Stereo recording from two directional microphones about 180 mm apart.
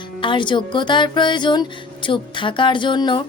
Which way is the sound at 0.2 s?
25° left (ahead or behind).